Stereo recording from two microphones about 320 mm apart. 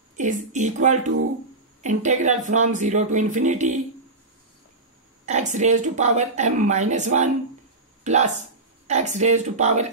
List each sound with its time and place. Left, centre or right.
0.2 s a woman's voice: right
1.8 s a woman's voice: right
5.2 s a woman's voice: right